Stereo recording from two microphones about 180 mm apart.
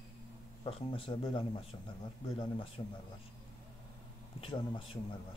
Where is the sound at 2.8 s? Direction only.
30° left (ahead or behind).